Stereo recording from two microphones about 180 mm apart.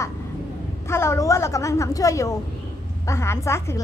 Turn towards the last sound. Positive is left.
turn(degrees=15)  # may be behind; listen again after turning